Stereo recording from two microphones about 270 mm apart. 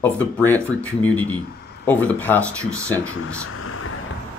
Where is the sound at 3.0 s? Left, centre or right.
Left.